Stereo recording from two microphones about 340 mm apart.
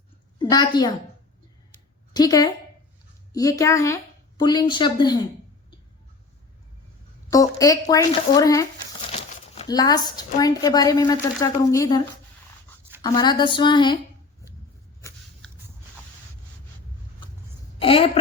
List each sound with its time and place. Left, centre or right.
0.5 s speech: centre
2.1 s a woman's voice: centre
7.3 s speech: centre
17.7 s a sound: centre